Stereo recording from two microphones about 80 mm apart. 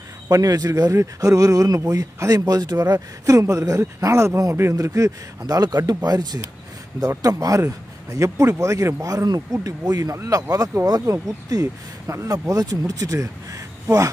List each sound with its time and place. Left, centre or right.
0.3 s speech: right
5.5 s a man's voice: right
7.2 s speech: right
9.0 s speech: right
11.1 s speech: right